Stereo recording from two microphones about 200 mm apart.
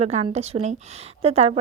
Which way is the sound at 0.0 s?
35° right (ahead or behind).